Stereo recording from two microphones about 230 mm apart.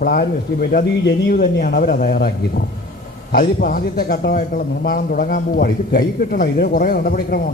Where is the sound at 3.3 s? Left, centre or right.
Left.